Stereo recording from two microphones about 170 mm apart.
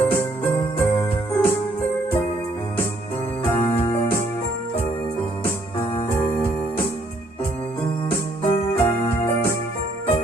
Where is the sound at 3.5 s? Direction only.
35° left (ahead or behind).